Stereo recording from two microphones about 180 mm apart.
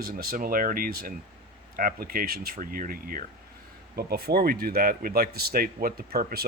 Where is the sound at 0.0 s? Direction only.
55° right (ahead or behind).